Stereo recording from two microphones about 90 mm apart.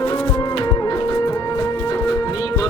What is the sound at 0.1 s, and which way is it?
Music, 50° left (ahead or behind).